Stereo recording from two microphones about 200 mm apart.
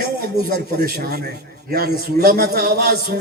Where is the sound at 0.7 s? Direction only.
50° right (ahead or behind).